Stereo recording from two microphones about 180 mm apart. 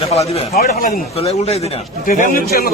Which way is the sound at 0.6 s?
55° left (ahead or behind).